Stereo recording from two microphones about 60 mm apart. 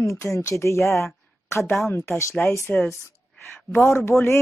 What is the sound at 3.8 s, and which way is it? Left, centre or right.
Speech, left.